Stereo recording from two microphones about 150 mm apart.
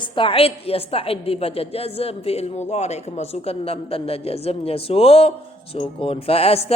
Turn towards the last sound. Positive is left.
turn(degrees=40)  # may be behind; listen again after turning